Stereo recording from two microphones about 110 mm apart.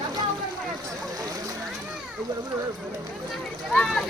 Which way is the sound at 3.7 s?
5° left (ahead or behind).